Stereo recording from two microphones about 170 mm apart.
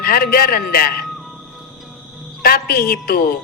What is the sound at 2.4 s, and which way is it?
Speech, 60° left (ahead or behind).